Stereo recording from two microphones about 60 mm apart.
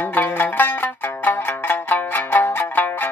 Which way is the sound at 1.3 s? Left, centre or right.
Left.